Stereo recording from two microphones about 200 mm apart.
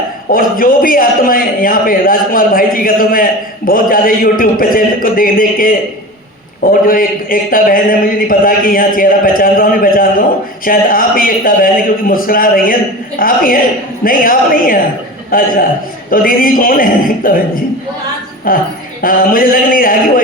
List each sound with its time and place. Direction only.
0.3 s speech: 45° left (ahead or behind)